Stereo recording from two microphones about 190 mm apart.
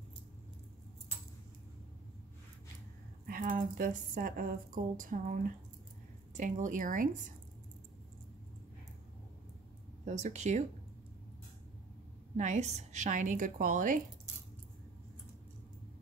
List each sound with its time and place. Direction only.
3.3 s speech: 45° right (ahead or behind)
10.0 s a woman's voice: 35° right (ahead or behind)
12.4 s a woman's voice: 40° right (ahead or behind)